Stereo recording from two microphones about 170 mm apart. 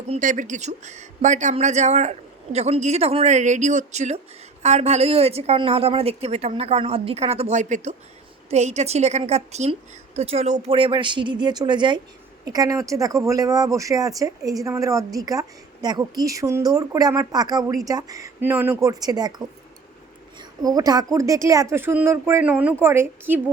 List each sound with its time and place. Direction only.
0.1 s a woman's voice: 50° right (ahead or behind); by 23.4 s 15° right (ahead or behind)